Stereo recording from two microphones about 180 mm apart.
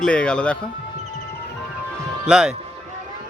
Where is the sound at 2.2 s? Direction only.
5° right (ahead or behind).